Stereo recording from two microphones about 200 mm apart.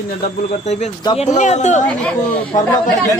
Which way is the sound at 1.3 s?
35° left (ahead or behind).